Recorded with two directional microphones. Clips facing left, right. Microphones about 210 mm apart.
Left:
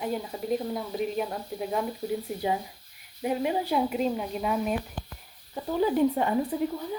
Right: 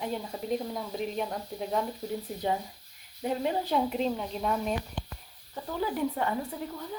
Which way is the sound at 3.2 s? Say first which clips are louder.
Left 2 dB; 10° left (ahead or behind).